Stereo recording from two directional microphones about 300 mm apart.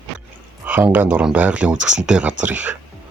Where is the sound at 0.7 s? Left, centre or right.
Centre.